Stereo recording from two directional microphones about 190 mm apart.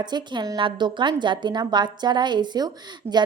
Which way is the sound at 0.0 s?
25° right (ahead or behind).